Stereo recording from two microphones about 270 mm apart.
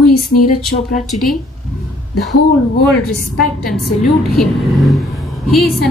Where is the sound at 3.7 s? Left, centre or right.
Centre.